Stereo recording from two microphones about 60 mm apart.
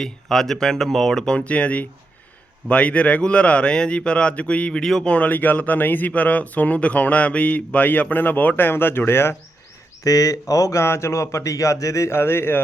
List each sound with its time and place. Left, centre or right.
0.0 s speech: centre
4.8 s speech: centre
5.1 s speech: left
10.0 s speech: left